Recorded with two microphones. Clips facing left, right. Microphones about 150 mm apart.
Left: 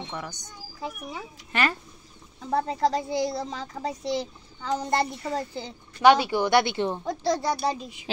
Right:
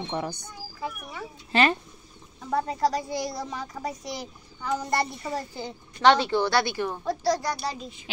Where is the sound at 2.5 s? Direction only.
25° left (ahead or behind).